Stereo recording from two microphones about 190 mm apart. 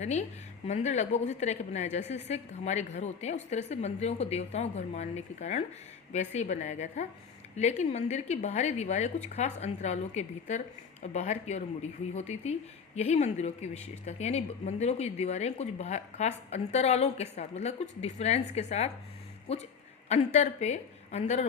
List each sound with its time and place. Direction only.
0.0 s a woman's voice: 35° left (ahead or behind)